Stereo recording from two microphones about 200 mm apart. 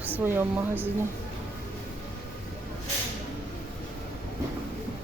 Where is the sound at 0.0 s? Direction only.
10° right (ahead or behind).